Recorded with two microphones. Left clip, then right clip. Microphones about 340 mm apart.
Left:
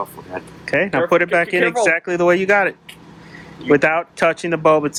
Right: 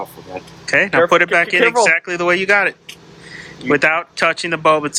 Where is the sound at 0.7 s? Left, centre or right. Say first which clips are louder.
Right 4 dB; centre.